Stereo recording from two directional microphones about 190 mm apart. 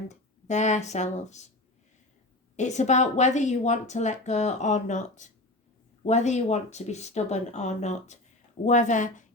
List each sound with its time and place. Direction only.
0.1 s speech: 40° left (ahead or behind)
2.6 s speech: 40° left (ahead or behind)